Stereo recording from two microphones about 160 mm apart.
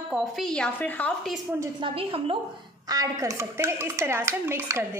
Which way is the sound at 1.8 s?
35° right (ahead or behind).